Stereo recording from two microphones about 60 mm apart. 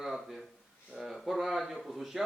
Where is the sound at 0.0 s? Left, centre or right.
Centre.